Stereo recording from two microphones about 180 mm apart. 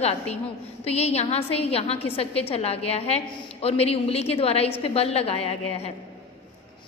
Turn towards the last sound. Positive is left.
turn(degrees=35)  # may be behind; listen again after turning